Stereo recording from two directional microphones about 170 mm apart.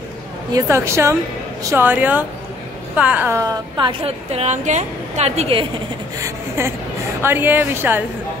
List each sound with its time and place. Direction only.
0.5 s a woman's voice: 20° right (ahead or behind)
3.7 s a woman's voice: 30° right (ahead or behind)
6.1 s a woman's voice: 20° right (ahead or behind)